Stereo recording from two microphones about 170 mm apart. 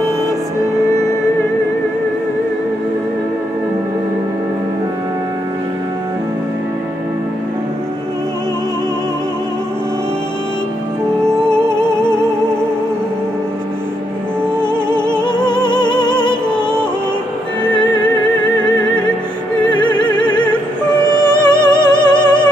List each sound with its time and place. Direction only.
11.4 s music: 5° left (ahead or behind)
15.2 s music: 25° left (ahead or behind)
19.7 s music: 25° left (ahead or behind)
21.5 s music: 25° left (ahead or behind)